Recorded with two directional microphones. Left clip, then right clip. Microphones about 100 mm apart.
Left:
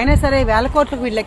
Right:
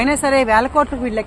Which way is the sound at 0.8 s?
10° left (ahead or behind).